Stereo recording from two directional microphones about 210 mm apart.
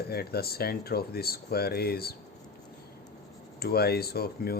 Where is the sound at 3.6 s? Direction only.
50° left (ahead or behind).